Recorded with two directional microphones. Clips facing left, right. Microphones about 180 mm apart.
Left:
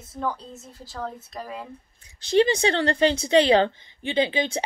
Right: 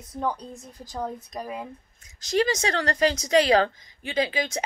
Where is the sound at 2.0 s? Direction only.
30° left (ahead or behind).